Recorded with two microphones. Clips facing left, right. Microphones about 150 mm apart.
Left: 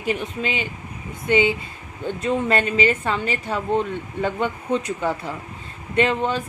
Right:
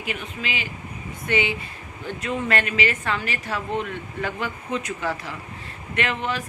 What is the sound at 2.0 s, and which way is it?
A woman's voice, 25° left (ahead or behind).